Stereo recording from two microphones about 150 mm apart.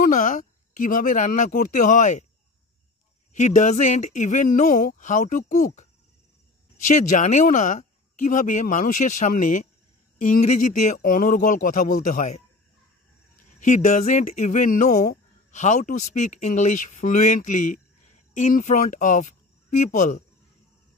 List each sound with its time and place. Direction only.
0.0 s speech: 60° left (ahead or behind)
3.3 s speech: 50° left (ahead or behind)
13.6 s speech: 55° left (ahead or behind)